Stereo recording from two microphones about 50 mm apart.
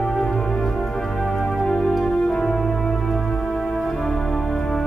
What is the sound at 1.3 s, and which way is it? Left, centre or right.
Music, centre.